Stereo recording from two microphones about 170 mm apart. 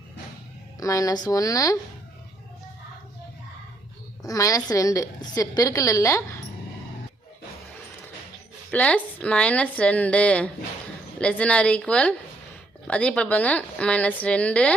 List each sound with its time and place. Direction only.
0.8 s a woman's voice: 20° left (ahead or behind)
4.2 s a woman's voice: 20° left (ahead or behind)
8.7 s a woman's voice: 5° left (ahead or behind)